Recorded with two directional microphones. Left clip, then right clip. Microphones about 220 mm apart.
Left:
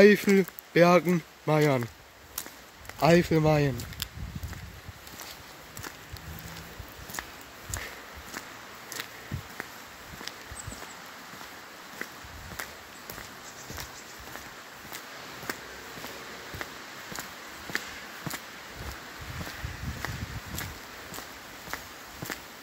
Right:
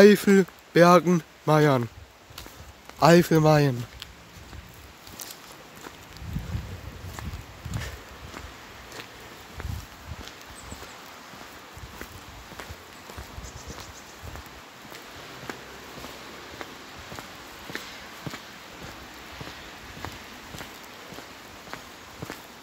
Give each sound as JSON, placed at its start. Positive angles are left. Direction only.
{"t": 0.0, "sound": "speech", "side_deg": -15}
{"t": 3.0, "sound": "speech", "side_deg": -20}
{"t": 15.5, "sound": "a sound", "side_deg": 5}